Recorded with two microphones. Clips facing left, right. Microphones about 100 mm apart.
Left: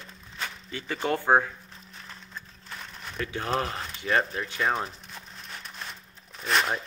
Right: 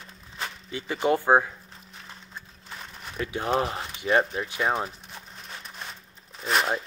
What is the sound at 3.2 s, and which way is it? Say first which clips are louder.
Speech: right 3 dB; 15° right (ahead or behind).